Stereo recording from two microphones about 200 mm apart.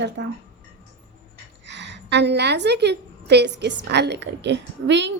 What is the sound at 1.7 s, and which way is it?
A woman's voice, 60° right (ahead or behind).